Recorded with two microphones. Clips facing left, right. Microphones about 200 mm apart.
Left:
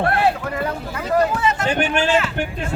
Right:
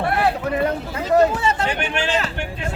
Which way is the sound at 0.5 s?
25° right (ahead or behind).